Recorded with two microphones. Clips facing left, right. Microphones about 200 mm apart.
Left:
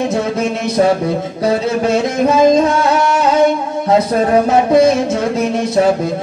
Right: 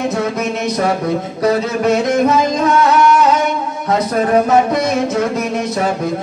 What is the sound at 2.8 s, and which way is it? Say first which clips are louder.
Music: right 2 dB; 30° left (ahead or behind).